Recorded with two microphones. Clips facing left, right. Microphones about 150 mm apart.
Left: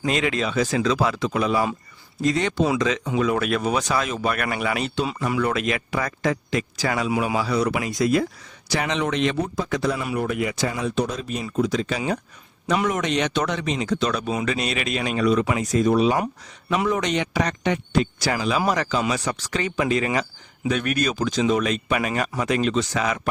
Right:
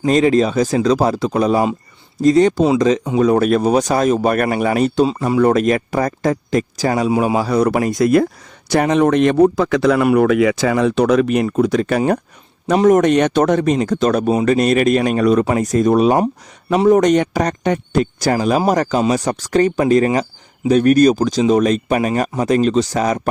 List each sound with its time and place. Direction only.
0.0 s speech: 35° right (ahead or behind)
5.0 s speech: 30° right (ahead or behind)
5.4 s a man's voice: 45° right (ahead or behind); by 11.4 s 70° right (ahead or behind)
11.4 s speech: 60° right (ahead or behind)
12.6 s speech: 45° right (ahead or behind)
16.1 s speech: 35° right (ahead or behind)